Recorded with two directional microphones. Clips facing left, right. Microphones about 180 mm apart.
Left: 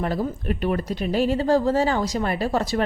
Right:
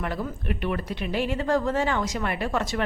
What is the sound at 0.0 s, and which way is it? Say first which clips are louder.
A woman's voice: left 5 dB; 35° left (ahead or behind).